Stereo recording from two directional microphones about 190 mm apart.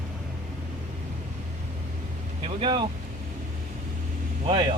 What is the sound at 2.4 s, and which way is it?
Vehicle, 25° right (ahead or behind).